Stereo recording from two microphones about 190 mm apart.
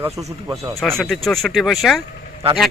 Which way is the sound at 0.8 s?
Centre (ahead or behind).